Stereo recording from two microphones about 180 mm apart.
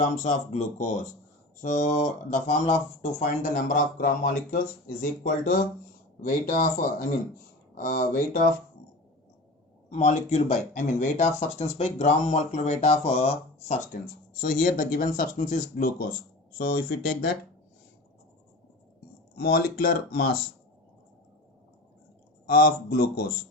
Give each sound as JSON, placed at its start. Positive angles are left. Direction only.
{"t": 0.0, "sound": "speech", "side_deg": 40}
{"t": 9.9, "sound": "speech", "side_deg": 40}
{"t": 16.6, "sound": "speech", "side_deg": 60}
{"t": 19.4, "sound": "speech", "side_deg": 60}
{"t": 22.4, "sound": "speech", "side_deg": 55}